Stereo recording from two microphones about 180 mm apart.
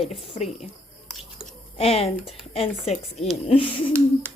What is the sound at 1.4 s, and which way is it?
Chewing, 35° left (ahead or behind).